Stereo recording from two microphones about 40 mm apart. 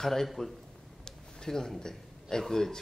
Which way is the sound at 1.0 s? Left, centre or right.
Centre.